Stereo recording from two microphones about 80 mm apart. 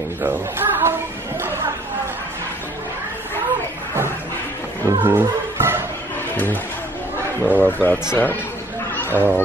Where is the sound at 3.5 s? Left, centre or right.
Right.